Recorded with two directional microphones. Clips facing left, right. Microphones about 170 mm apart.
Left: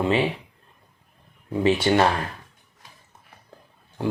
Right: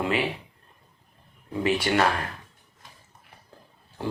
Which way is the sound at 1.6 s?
25° left (ahead or behind).